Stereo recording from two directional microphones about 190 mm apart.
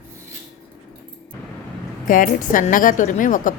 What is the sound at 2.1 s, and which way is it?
Speech, 45° left (ahead or behind).